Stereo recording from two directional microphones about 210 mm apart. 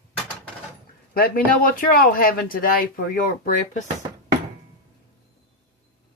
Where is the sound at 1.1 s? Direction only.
45° left (ahead or behind).